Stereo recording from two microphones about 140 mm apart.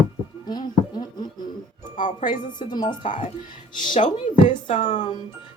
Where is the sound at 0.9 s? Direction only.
30° left (ahead or behind).